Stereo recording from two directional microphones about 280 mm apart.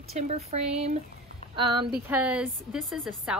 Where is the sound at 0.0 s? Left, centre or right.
Right.